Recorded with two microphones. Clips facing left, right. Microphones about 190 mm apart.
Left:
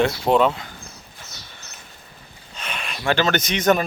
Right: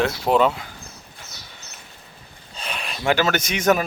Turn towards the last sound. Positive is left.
turn(degrees=-5)  # may be behind; listen again after turning